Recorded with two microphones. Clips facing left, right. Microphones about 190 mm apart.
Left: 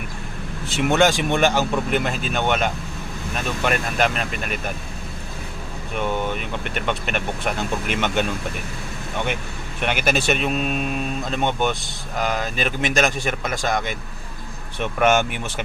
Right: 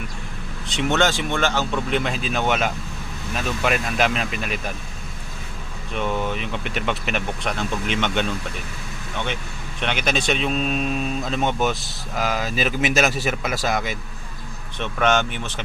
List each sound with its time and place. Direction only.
0.7 s speech: 10° left (ahead or behind)
6.0 s speech: centre (ahead or behind)
9.8 s speech: 5° left (ahead or behind)
14.8 s speech: 10° left (ahead or behind)